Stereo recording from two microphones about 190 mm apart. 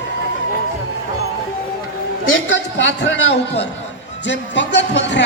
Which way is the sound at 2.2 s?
85° left.